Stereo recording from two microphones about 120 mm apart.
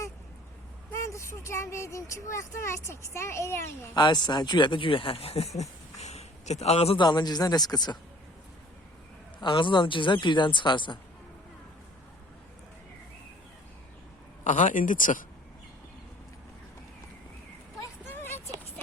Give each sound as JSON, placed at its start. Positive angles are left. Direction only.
{"t": 0.9, "sound": "speech", "side_deg": 25}
{"t": 3.9, "sound": "speech", "side_deg": 35}
{"t": 6.9, "sound": "speech", "side_deg": 40}
{"t": 9.4, "sound": "speech", "side_deg": 40}
{"t": 14.4, "sound": "speech", "side_deg": 90}
{"t": 18.0, "sound": "a sound", "side_deg": 20}